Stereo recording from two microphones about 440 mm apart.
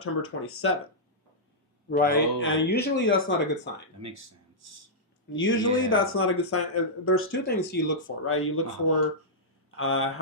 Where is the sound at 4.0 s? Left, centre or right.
Right.